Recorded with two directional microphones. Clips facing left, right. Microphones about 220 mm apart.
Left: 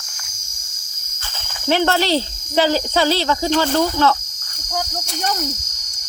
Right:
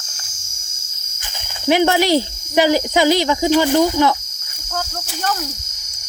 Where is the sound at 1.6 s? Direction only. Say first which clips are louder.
Right 3 dB; 15° right (ahead or behind).